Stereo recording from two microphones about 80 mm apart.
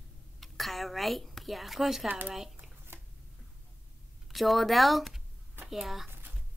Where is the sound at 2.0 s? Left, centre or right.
Centre.